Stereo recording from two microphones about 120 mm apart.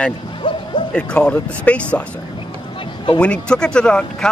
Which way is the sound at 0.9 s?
10° left (ahead or behind).